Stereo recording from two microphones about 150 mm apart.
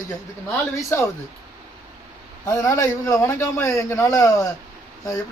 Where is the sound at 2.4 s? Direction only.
20° left (ahead or behind).